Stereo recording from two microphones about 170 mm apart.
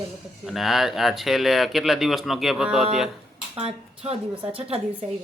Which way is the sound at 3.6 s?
35° right (ahead or behind).